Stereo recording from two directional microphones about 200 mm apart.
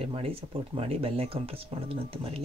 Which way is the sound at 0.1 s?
30° right (ahead or behind).